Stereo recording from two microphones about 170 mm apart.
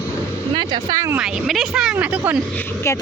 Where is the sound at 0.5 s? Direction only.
25° right (ahead or behind).